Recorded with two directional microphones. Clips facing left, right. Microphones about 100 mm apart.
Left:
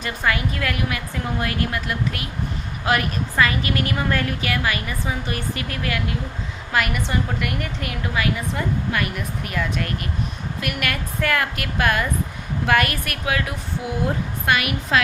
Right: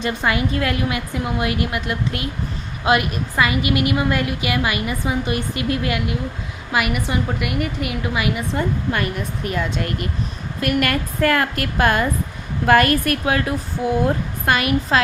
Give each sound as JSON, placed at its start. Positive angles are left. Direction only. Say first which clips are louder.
{"t": 0.0, "sound": "a woman's voice", "louder": "right 3 dB", "side_deg": -20}
{"t": 6.7, "sound": "a woman's voice", "louder": "right 2 dB", "side_deg": -10}
{"t": 8.5, "sound": "a woman's voice", "louder": "right 2 dB", "side_deg": -30}
{"t": 10.6, "sound": "a woman's voice", "louder": "right 7 dB", "side_deg": -40}